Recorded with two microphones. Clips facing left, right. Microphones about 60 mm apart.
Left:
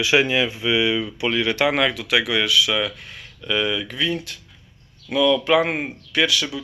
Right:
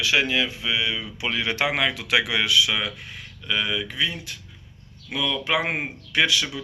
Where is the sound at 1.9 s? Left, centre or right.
Right.